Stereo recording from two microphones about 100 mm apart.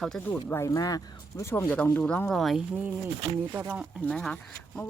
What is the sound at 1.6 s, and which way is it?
Speech, 15° left (ahead or behind).